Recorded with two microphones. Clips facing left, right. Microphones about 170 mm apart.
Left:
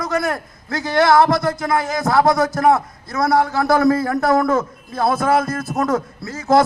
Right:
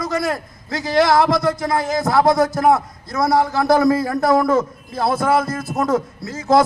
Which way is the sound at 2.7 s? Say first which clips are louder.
Right 1 dB; 50° left (ahead or behind).